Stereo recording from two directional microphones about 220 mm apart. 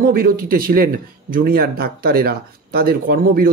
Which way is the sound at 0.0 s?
40° right (ahead or behind).